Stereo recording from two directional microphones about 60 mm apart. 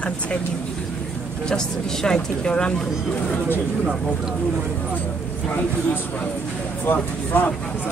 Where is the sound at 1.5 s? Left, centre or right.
Centre.